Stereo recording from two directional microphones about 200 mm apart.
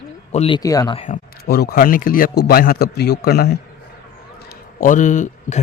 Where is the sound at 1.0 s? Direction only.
40° left (ahead or behind).